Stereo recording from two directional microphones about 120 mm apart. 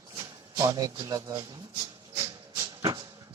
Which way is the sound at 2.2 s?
30° right (ahead or behind).